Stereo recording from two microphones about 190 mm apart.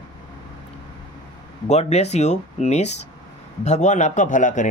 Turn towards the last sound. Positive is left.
turn(degrees=40)  # may be behind; listen again after turning